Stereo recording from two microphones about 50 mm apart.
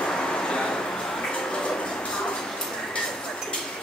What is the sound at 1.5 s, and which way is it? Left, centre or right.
Train, centre.